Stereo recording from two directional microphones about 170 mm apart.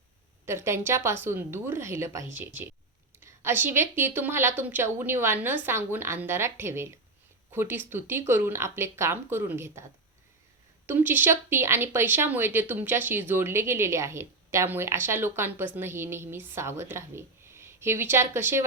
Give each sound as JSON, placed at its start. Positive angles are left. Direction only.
{"t": 0.4, "sound": "speech", "side_deg": -15}
{"t": 10.8, "sound": "speech", "side_deg": -10}